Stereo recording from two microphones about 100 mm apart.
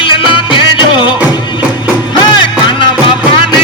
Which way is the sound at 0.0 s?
55° left (ahead or behind).